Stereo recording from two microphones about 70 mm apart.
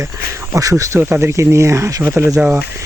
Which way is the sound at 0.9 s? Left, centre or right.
Right.